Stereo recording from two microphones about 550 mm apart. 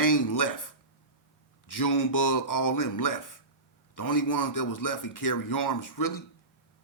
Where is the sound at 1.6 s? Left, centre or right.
Left.